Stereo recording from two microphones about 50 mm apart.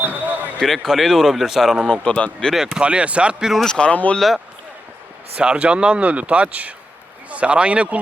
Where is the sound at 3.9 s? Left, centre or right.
Left.